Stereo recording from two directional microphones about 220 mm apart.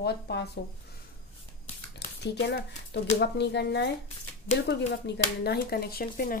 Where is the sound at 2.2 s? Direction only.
50° left (ahead or behind).